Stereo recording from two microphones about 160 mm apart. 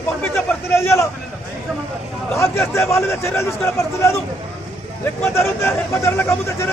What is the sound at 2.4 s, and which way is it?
Speech, 15° left (ahead or behind).